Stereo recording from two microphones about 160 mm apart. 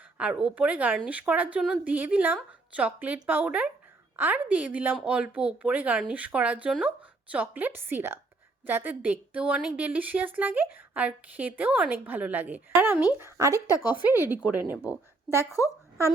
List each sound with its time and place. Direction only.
0.2 s a woman's voice: 5° right (ahead or behind)